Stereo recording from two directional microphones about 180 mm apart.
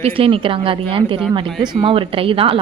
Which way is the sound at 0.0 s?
30° right (ahead or behind).